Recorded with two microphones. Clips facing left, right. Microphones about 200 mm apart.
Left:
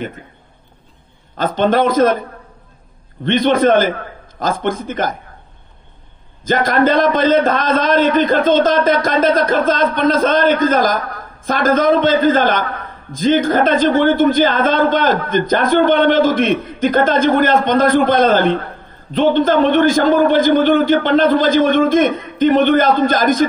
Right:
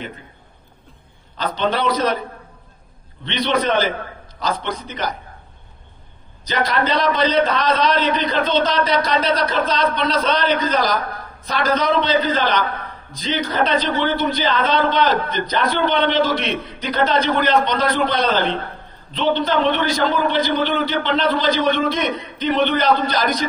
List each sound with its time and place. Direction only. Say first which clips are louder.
1.3 s a man's voice: left 7 dB; 50° left (ahead or behind)
3.3 s a man's voice: left 8 dB; 50° left (ahead or behind)
6.4 s a man's voice: left 7 dB; 50° left (ahead or behind)